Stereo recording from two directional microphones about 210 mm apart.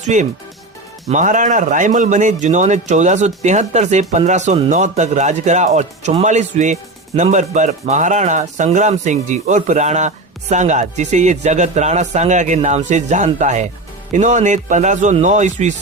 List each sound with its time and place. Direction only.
0.0 s speech: 35° right (ahead or behind)